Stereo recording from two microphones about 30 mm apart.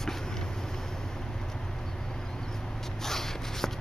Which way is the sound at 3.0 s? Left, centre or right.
Centre.